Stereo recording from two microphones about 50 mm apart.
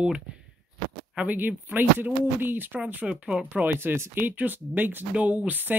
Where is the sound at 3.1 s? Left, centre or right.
Right.